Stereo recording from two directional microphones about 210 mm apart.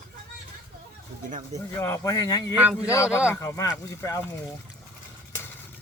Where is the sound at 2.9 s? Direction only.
15° left (ahead or behind).